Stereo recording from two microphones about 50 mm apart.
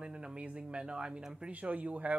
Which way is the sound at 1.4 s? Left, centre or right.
Right.